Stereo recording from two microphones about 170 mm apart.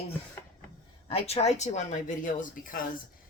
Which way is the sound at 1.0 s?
35° left (ahead or behind).